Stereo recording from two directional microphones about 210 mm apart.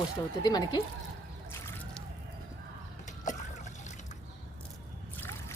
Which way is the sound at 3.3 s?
35° left (ahead or behind).